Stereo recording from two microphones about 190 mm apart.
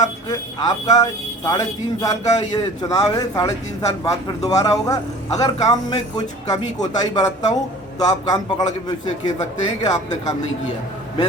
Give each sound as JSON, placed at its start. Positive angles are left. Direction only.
{"t": 0.0, "sound": "speech", "side_deg": 20}